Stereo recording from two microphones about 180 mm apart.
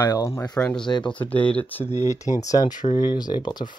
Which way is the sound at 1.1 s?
10° left (ahead or behind).